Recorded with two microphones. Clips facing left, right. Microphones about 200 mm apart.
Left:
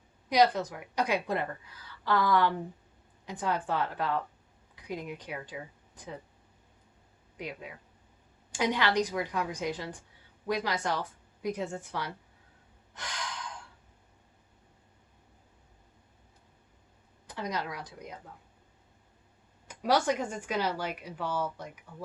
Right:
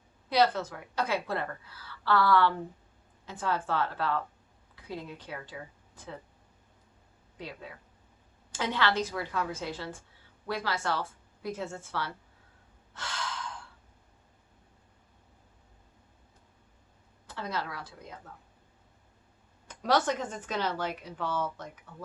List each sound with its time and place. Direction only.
0.3 s speech: 15° left (ahead or behind)
7.3 s speech: 15° left (ahead or behind)
12.9 s gasp: 15° left (ahead or behind)
17.2 s speech: 15° left (ahead or behind)
19.6 s speech: 10° left (ahead or behind)